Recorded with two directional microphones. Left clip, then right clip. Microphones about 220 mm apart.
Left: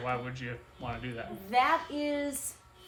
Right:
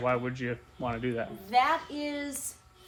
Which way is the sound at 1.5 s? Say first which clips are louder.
Right 1 dB; centre (ahead or behind).